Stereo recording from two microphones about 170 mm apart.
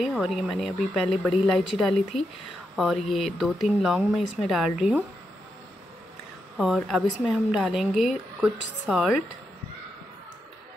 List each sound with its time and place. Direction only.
0.0 s speech: centre (ahead or behind)
6.6 s speech: centre (ahead or behind)